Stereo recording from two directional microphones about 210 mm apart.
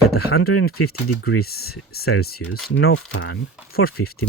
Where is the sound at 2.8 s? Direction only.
75° left (ahead or behind).